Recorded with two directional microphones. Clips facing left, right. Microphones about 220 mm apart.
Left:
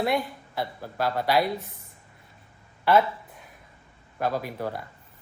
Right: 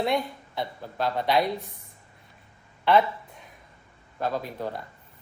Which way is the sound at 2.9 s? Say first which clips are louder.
Even; 5° left (ahead or behind).